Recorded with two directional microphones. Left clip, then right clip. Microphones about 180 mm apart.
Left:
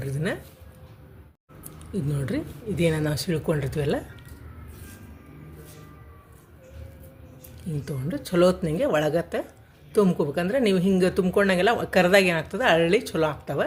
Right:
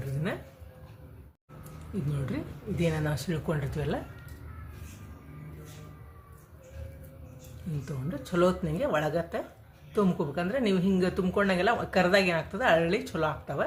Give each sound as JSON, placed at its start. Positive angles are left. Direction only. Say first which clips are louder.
{"t": 2.2, "sound": "speech", "louder": "left 6 dB", "side_deg": 35}
{"t": 7.9, "sound": "speech", "louder": "left 6 dB", "side_deg": 35}